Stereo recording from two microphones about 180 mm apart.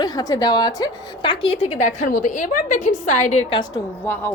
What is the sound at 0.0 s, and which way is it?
A woman's voice, 20° left (ahead or behind).